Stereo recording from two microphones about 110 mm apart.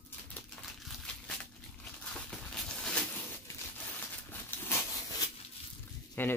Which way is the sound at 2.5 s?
5° left (ahead or behind).